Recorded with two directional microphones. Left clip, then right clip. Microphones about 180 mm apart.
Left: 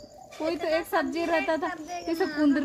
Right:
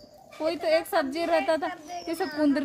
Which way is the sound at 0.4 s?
10° right (ahead or behind).